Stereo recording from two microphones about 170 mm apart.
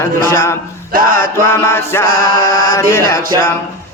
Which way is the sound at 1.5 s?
15° left (ahead or behind).